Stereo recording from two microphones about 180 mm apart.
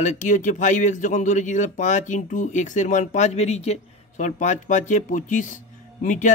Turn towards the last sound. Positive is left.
turn(degrees=45)  # may be behind; listen again after turning